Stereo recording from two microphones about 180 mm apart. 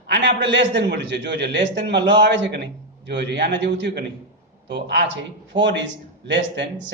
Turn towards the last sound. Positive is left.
turn(degrees=-80)